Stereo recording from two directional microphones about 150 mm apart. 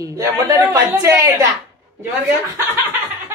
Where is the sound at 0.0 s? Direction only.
20° right (ahead or behind).